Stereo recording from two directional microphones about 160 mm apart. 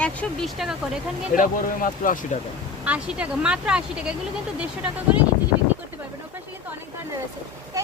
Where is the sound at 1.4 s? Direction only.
55° left (ahead or behind).